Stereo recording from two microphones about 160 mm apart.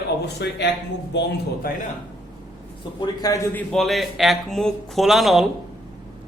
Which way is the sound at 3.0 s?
20° left (ahead or behind).